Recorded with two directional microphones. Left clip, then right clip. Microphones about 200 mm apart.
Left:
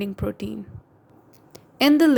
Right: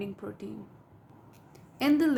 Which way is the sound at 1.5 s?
40° left (ahead or behind).